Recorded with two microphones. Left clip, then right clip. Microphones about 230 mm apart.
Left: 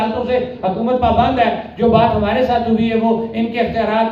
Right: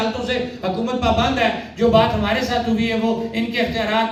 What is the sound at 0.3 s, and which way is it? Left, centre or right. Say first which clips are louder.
A man's voice: left 5 dB; right.